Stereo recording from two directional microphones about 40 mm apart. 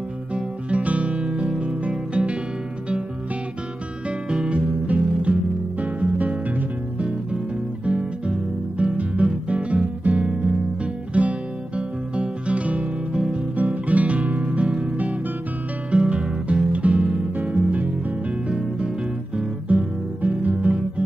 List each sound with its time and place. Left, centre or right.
0.3 s guitar: right
1.6 s music: right
4.3 s music: right
7.8 s guitar: right
8.7 s music: right
10.1 s guitar: right
11.1 s music: right
18.5 s music: centre
19.3 s guitar: right
20.2 s music: right